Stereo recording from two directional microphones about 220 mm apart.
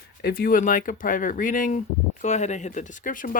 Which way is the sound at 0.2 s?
45° left (ahead or behind).